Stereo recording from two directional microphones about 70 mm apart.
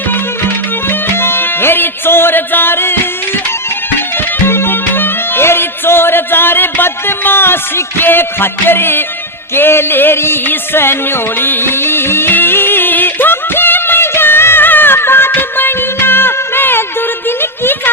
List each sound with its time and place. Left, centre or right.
0.1 s music: left
4.4 s music: left